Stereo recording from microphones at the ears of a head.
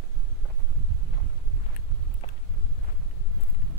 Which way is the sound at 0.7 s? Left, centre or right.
Right.